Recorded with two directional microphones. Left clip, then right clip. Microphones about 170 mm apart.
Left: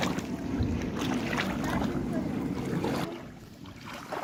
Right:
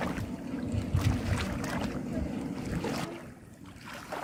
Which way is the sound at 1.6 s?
15° right (ahead or behind).